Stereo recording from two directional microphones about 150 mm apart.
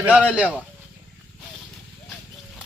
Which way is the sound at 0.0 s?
5° right (ahead or behind).